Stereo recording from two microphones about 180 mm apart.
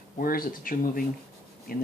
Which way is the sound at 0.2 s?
50° left (ahead or behind).